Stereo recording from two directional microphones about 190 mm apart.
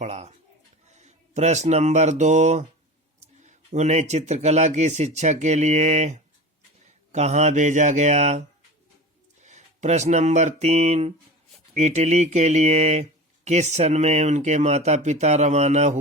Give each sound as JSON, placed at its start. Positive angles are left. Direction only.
{"t": 0.0, "sound": "speech", "side_deg": -35}